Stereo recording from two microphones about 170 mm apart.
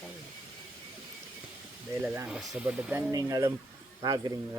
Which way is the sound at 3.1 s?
20° right (ahead or behind).